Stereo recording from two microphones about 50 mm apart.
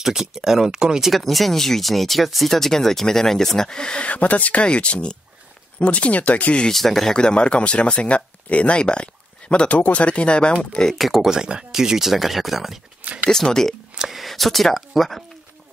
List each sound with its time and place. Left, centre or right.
0.0 s speech: centre
1.1 s speech: centre; by 6.7 s left
6.7 s speech: centre
11.0 s speech: centre
11.2 s speech: centre
13.3 s speech: centre
13.9 s speech: centre